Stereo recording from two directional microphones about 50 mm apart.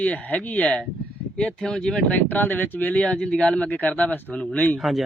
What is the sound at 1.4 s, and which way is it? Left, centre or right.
Speech, centre.